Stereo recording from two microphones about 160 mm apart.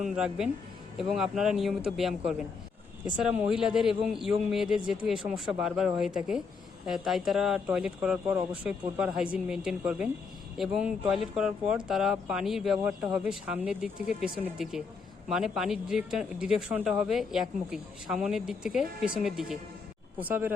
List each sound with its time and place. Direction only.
0.0 s speech: 5° right (ahead or behind)